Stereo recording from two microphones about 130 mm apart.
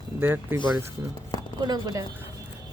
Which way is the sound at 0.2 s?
15° right (ahead or behind).